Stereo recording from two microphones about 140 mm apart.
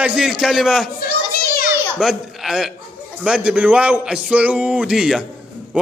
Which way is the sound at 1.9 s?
Centre (ahead or behind).